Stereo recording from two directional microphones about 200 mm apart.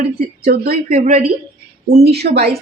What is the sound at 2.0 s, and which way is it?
Speech, 55° right (ahead or behind).